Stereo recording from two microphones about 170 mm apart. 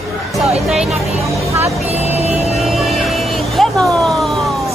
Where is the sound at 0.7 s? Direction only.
Centre (ahead or behind).